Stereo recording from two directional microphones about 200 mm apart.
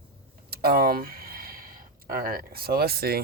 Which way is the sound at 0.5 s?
50° right (ahead or behind).